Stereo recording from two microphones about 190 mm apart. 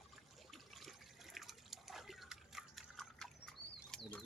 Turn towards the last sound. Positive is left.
turn(degrees=0)  # may be behind; listen again after turning